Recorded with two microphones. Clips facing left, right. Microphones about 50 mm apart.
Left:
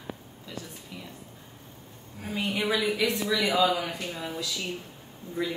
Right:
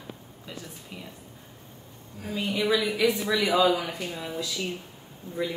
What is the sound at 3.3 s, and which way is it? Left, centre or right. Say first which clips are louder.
Speech: right 2 dB; right.